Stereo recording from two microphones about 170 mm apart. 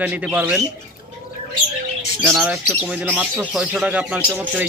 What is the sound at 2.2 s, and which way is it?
Speech, 5° right (ahead or behind).